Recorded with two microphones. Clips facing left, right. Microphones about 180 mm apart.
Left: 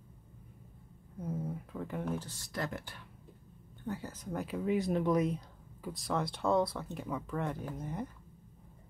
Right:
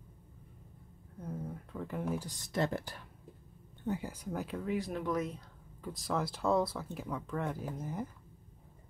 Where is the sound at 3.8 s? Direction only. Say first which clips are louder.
Right 3 dB; 15° right (ahead or behind); by 4.6 s centre (ahead or behind).